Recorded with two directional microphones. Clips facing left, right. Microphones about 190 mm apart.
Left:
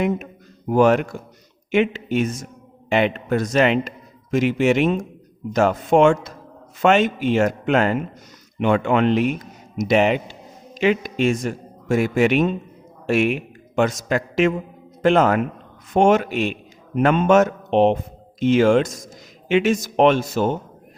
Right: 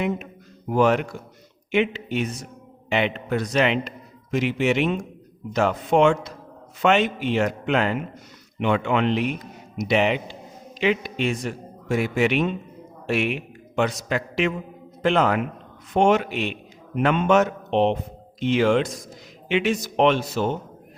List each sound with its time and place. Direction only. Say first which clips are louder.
0.7 s a man's voice: left 4 dB; 45° left (ahead or behind)